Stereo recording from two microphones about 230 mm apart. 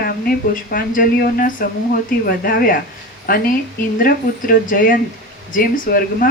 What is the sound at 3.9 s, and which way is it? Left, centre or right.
Speech, left.